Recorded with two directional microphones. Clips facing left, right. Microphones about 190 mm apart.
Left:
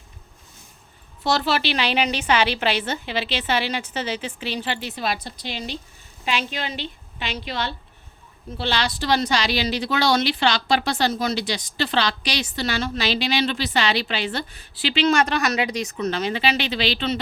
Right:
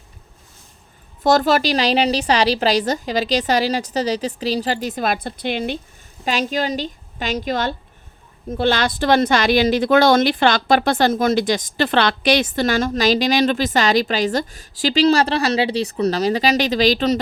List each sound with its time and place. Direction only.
1.2 s a woman's voice: 45° right (ahead or behind)
6.2 s a woman's voice: 40° right (ahead or behind)